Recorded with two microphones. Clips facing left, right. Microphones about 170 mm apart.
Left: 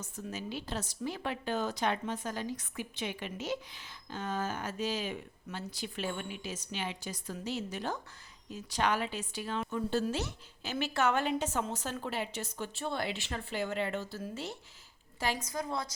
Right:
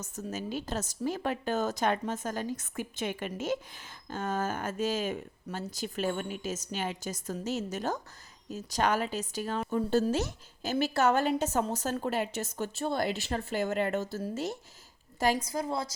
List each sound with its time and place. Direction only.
0.0 s speech: 40° right (ahead or behind)
15.4 s a woman's voice: 30° right (ahead or behind)